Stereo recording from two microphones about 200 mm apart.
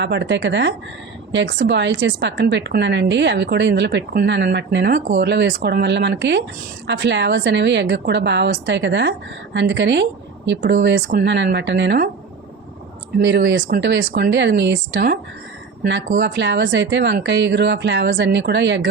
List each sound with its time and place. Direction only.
0.0 s a woman's voice: 60° right (ahead or behind)
4.9 s speech: 40° right (ahead or behind)
5.2 s a woman's voice: 60° right (ahead or behind)
13.2 s a woman's voice: 65° right (ahead or behind)
13.7 s speech: 50° right (ahead or behind)
14.3 s a woman's voice: 65° right (ahead or behind)
16.2 s a woman's voice: 60° right (ahead or behind)